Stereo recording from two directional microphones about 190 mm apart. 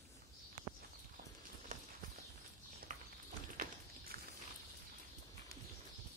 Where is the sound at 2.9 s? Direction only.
40° right (ahead or behind).